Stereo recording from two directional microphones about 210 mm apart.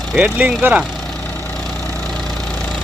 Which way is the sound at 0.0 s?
Centre (ahead or behind).